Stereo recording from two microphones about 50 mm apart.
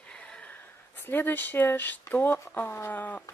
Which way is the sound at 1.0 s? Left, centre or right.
Left.